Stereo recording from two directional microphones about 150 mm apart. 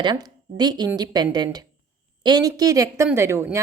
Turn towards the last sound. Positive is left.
turn(degrees=-15)  # may be behind; listen again after turning